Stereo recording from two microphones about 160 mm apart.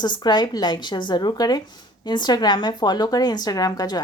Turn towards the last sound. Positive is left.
turn(degrees=25)  # may be behind; listen again after turning